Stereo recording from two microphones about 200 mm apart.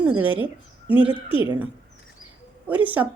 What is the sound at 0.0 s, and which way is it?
Speech, 10° right (ahead or behind).